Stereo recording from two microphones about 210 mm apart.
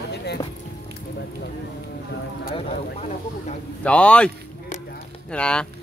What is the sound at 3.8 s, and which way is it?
Speech, 5° left (ahead or behind).